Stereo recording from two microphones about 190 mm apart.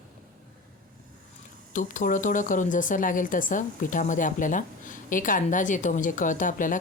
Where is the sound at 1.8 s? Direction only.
45° left (ahead or behind).